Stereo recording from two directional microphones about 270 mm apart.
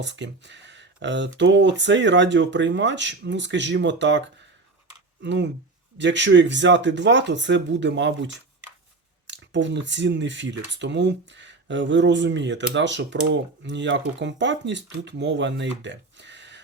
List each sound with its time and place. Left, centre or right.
0.0 s speech: right
5.2 s speech: right